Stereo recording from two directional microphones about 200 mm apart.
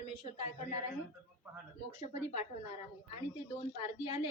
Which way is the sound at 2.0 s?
35° left (ahead or behind).